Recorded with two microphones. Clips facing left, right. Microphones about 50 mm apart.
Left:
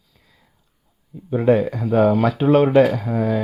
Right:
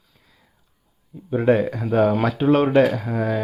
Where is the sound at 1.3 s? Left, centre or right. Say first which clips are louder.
Left 1 dB; centre.